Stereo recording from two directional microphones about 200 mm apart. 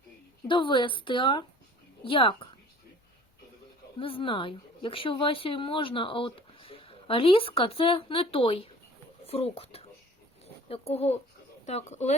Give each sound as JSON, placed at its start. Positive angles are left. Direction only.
{"t": 0.4, "sound": "speech", "side_deg": 25}
{"t": 4.0, "sound": "speech", "side_deg": 25}